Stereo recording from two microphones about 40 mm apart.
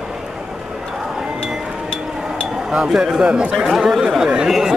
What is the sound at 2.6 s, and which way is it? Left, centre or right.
Speech, centre.